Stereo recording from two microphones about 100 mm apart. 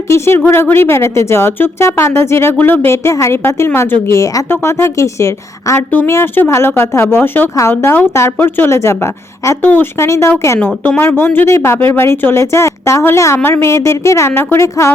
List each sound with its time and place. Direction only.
0.1 s a woman's voice: 20° left (ahead or behind)
10.8 s a woman's voice: 20° left (ahead or behind)